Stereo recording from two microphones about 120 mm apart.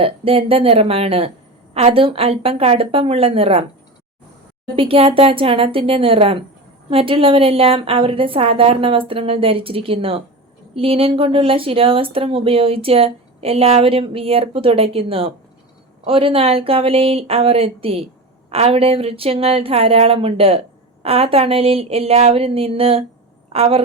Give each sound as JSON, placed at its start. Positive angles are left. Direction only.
{"t": 0.0, "sound": "speech", "side_deg": -50}
{"t": 4.8, "sound": "a woman's voice", "side_deg": -50}